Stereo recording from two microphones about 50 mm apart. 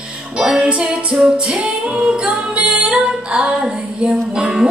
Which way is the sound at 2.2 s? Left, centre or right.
Right.